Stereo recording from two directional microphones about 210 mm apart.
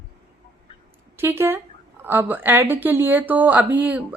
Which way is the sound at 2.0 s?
10° right (ahead or behind).